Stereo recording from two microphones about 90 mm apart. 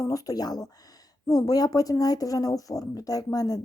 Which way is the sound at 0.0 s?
40° left (ahead or behind).